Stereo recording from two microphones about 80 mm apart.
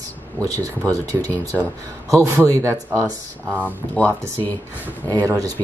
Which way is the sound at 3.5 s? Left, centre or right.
Right.